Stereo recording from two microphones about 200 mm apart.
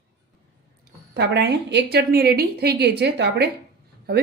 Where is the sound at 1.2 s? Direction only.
60° right (ahead or behind).